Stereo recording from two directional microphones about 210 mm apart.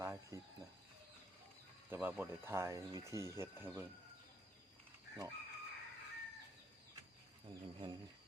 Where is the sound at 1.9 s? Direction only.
10° right (ahead or behind).